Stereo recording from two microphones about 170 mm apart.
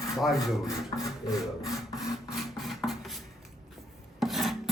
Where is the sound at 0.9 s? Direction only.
25° left (ahead or behind).